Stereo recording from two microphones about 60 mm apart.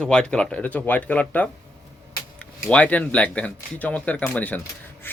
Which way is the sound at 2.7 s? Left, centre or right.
Left.